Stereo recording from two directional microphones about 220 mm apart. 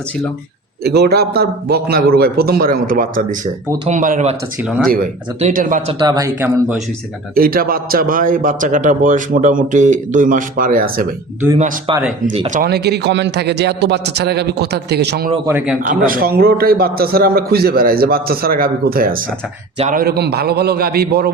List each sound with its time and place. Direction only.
0.9 s a man's voice: 45° right (ahead or behind)
5.4 s a man's voice: 35° right (ahead or behind)
6.0 s speech: 15° right (ahead or behind)
7.3 s a man's voice: 40° right (ahead or behind)
11.5 s a man's voice: 25° right (ahead or behind)
12.5 s a man's voice: 45° right (ahead or behind)
15.4 s speech: 5° right (ahead or behind)
15.9 s a man's voice: 40° right (ahead or behind)